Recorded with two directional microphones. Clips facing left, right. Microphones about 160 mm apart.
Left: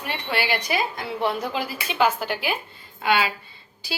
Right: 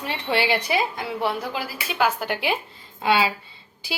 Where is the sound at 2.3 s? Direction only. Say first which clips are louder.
Right 2 dB; 25° right (ahead or behind).